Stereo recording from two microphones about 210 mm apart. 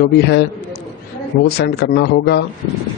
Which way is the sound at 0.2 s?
55° left (ahead or behind).